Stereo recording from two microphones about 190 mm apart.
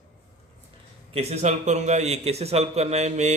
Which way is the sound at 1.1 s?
35° right (ahead or behind).